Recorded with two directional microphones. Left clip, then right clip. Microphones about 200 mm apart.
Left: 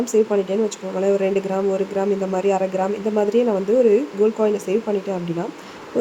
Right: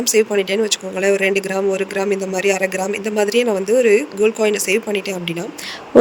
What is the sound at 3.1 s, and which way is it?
Speech, 50° right (ahead or behind).